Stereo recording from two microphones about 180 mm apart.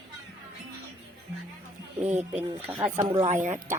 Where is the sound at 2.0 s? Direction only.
35° right (ahead or behind).